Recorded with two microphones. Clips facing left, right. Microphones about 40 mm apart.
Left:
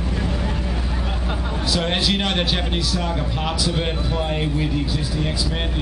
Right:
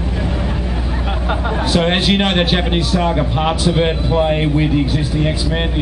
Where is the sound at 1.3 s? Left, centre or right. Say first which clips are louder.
Right 8 dB; right.